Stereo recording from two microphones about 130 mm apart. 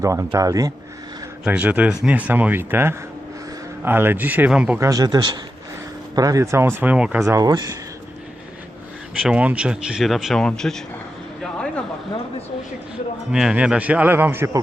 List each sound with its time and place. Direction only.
0.0 s speech: 25° right (ahead or behind)
1.5 s a man's voice: 10° right (ahead or behind)
4.8 s speech: 25° right (ahead or behind); by 7.2 s 10° right (ahead or behind)
7.2 s speech: 25° right (ahead or behind)
9.2 s speech: 10° right (ahead or behind)
13.3 s a man's voice: 5° right (ahead or behind)